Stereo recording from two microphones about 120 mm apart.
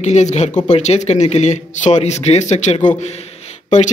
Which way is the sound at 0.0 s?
75° left (ahead or behind).